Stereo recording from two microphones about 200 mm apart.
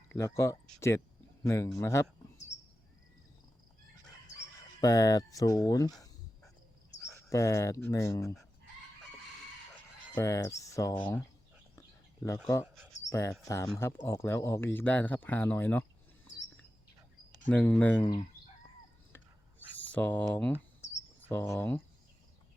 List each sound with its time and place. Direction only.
0.1 s speech: 15° left (ahead or behind)
4.8 s speech: 20° left (ahead or behind)
7.1 s speech: 15° left (ahead or behind)
10.2 s speech: 15° left (ahead or behind)
13.1 s speech: 15° left (ahead or behind)
17.5 s speech: 5° left (ahead or behind)
19.1 s a sound: 10° left (ahead or behind)
21.2 s speech: 10° left (ahead or behind)